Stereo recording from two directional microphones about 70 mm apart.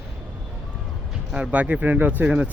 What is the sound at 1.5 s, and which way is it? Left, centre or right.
Speech, right.